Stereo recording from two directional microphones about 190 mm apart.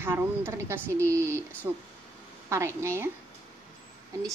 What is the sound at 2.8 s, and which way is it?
Speech, 15° right (ahead or behind).